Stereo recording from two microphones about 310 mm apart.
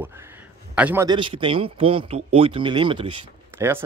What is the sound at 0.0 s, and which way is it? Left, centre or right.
Speech, centre.